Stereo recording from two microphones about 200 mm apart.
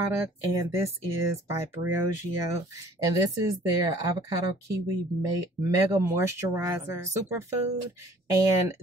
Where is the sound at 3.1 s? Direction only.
15° right (ahead or behind).